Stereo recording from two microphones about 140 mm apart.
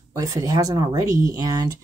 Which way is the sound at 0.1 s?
25° right (ahead or behind).